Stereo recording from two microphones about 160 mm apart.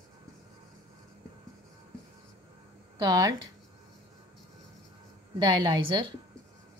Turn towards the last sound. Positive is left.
turn(degrees=-30)  # may be behind; listen again after turning